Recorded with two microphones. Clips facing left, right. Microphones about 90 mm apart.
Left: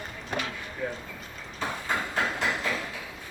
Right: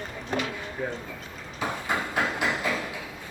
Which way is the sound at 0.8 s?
30° right (ahead or behind).